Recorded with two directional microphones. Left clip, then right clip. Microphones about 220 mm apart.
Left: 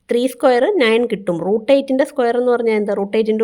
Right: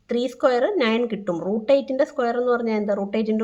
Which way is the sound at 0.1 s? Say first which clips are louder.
Left 6 dB; 40° left (ahead or behind).